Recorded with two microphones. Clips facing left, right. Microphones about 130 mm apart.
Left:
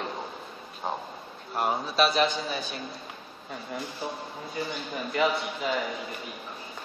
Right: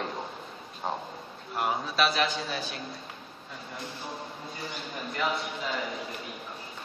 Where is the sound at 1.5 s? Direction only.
30° left (ahead or behind).